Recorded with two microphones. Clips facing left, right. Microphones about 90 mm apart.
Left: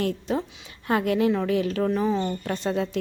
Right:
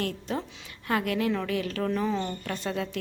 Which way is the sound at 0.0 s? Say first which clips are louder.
Left 5 dB; 20° left (ahead or behind).